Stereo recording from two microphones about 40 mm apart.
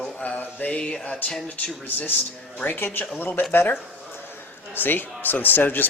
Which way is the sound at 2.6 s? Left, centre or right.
Left.